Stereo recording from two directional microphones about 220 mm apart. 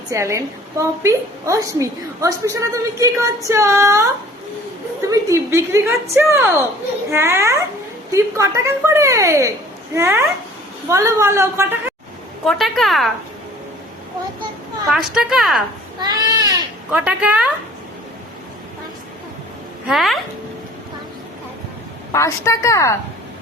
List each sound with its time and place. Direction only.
0.1 s a woman's voice: 15° right (ahead or behind)
5.0 s a woman's voice: 15° right (ahead or behind)
12.5 s a woman's voice: centre (ahead or behind)
14.8 s a woman's voice: centre (ahead or behind)
16.0 s speech: 20° right (ahead or behind)
16.9 s a woman's voice: 5° right (ahead or behind)
19.9 s a woman's voice: centre (ahead or behind)
22.1 s a woman's voice: 15° left (ahead or behind)